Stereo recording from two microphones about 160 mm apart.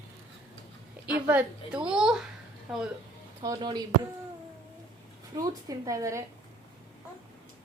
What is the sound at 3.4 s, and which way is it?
Speech, 25° right (ahead or behind).